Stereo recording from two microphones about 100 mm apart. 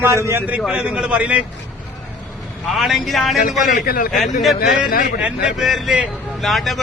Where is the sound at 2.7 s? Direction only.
Centre (ahead or behind).